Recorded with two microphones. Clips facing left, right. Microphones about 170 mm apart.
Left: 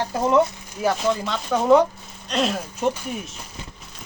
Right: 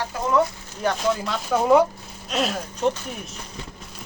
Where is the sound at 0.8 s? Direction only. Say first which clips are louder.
Left 1 dB; centre (ahead or behind).